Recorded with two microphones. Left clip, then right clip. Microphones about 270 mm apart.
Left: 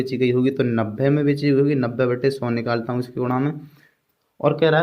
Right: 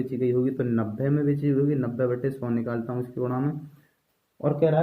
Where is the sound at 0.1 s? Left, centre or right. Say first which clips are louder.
Left 5 dB; left.